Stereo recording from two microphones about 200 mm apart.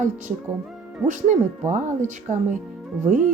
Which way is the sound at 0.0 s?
40° right (ahead or behind).